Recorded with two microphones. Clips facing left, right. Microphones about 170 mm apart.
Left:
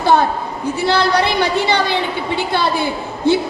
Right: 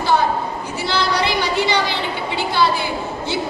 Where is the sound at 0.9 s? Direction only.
55° left (ahead or behind).